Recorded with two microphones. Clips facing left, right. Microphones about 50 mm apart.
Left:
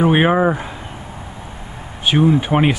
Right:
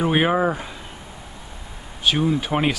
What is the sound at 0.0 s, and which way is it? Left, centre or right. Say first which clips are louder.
Speech: left 5 dB; centre.